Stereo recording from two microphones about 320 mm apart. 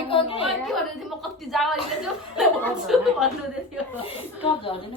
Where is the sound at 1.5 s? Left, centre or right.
Centre.